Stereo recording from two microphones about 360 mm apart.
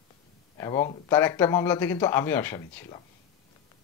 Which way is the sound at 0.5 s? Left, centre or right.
Centre.